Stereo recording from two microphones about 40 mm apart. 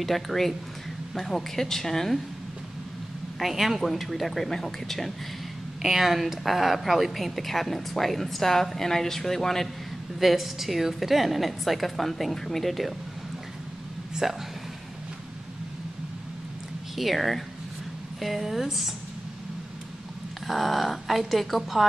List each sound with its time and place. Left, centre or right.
0.0 s speech: centre
3.3 s speech: centre
5.8 s speech: centre
10.2 s speech: centre
16.9 s speech: centre
20.4 s speech: centre